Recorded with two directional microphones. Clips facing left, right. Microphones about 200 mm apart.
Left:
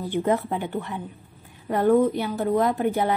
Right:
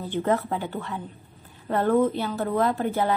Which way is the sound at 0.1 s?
15° left (ahead or behind).